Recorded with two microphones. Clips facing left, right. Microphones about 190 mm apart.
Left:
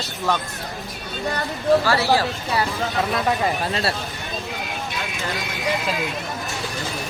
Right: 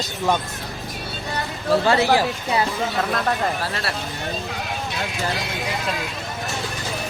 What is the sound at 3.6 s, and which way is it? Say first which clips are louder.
Speech: left 3 dB; 20° left (ahead or behind).